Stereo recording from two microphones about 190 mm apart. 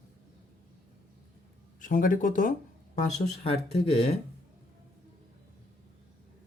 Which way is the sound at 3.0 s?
35° left (ahead or behind).